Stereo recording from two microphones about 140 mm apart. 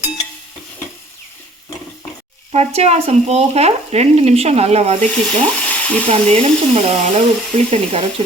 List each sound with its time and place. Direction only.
2.5 s speech: 50° right (ahead or behind)
5.1 s frying: 10° left (ahead or behind)
6.1 s speech: 45° right (ahead or behind)